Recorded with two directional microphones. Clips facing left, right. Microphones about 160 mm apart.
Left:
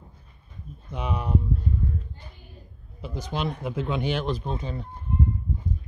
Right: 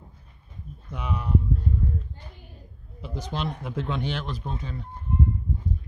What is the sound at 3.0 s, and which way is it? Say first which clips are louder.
Speech: left 1 dB; 5° left (ahead or behind).